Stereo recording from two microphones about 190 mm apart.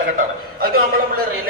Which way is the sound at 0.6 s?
50° right (ahead or behind).